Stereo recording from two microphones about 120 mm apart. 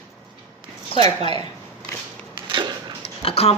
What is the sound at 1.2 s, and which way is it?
Speech, 45° left (ahead or behind).